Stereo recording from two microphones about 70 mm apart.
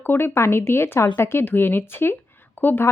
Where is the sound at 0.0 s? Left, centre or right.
Left.